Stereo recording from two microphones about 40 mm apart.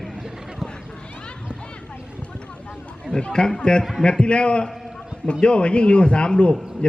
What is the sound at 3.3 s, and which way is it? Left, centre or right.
A man's voice, centre.